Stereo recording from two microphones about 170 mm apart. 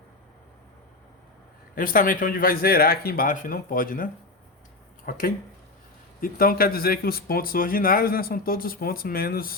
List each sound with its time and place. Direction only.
1.7 s speech: 55° left (ahead or behind)